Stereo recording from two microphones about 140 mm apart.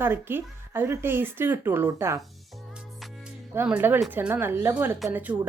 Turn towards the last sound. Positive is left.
turn(degrees=-10)  # may be behind; listen again after turning